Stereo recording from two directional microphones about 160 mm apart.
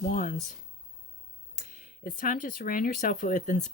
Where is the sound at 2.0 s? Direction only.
60° left (ahead or behind).